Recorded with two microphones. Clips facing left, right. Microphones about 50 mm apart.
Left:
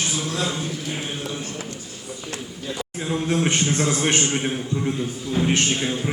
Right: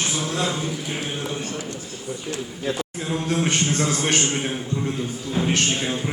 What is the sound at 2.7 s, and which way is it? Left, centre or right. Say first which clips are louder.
Speech: right 4 dB; right.